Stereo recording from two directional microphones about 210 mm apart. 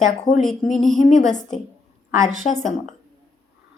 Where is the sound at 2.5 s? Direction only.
Centre (ahead or behind).